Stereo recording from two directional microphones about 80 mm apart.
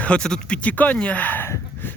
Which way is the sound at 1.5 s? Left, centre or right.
Left.